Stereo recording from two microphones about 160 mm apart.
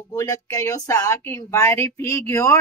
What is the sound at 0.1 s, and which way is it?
A woman's voice, 25° left (ahead or behind).